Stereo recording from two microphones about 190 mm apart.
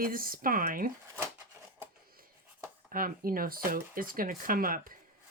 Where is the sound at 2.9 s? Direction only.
50° right (ahead or behind).